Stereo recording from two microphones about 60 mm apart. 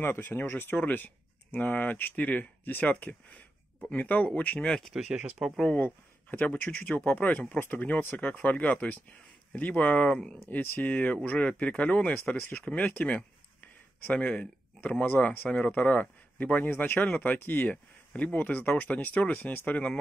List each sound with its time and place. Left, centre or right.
0.0 s speech: left
4.6 s speech: centre
4.9 s speech: centre
5.8 s speech: left; by 10.4 s centre
10.5 s speech: left